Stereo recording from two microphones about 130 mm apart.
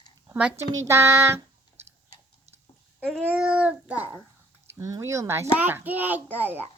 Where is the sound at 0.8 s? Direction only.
20° right (ahead or behind).